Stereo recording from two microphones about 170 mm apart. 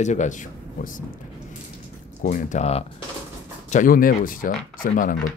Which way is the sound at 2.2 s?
45° left (ahead or behind).